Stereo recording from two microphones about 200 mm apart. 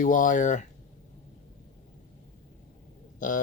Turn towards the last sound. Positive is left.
turn(degrees=40)  # may be behind; listen again after turning